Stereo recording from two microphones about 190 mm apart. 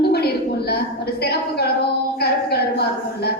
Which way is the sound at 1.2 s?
55° left (ahead or behind).